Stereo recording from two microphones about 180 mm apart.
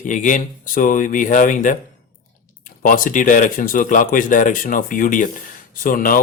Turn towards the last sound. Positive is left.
turn(degrees=50)  # may be behind; listen again after turning